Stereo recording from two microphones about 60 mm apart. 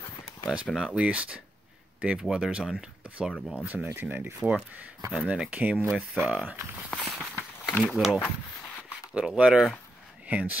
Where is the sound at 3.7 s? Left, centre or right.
Right.